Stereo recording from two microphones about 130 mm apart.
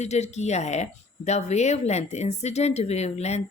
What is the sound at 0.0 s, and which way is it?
Speech, 60° left (ahead or behind).